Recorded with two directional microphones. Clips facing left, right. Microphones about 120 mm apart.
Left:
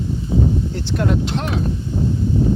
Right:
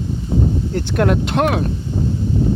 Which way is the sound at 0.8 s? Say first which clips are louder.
Right 7 dB; 60° right (ahead or behind).